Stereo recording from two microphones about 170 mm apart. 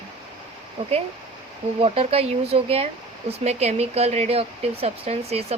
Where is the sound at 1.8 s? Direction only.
35° right (ahead or behind).